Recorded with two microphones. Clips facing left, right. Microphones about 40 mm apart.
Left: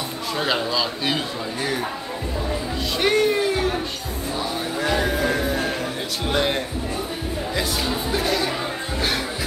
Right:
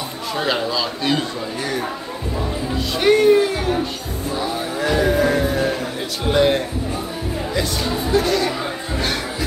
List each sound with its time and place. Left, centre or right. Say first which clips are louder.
0.4 s a man's voice: right 2 dB; centre
3.0 s music: right 6 dB; centre
6.2 s a man's voice: right 6 dB; centre
8.1 s speech: right 6 dB; centre